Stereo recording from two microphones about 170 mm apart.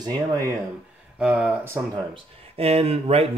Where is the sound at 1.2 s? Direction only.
5° right (ahead or behind).